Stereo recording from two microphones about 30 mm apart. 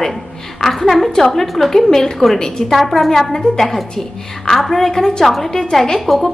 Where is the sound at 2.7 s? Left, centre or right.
Centre.